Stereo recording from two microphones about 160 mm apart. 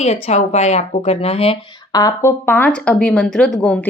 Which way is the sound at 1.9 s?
20° left (ahead or behind).